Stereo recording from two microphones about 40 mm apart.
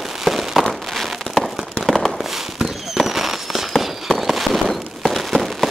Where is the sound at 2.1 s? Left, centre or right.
Centre.